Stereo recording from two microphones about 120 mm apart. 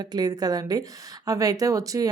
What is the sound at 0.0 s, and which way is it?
A woman's voice, 35° right (ahead or behind).